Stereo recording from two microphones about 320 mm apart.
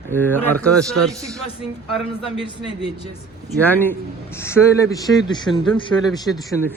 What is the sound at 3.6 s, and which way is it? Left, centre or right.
A man's voice, centre.